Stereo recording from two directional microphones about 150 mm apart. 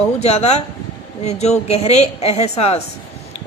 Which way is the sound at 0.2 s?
45° left (ahead or behind).